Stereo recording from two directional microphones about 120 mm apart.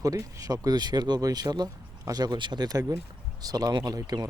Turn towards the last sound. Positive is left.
turn(degrees=-30)  # may be behind; listen again after turning